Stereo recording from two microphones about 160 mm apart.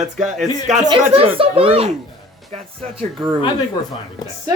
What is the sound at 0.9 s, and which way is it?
Speech, 35° right (ahead or behind).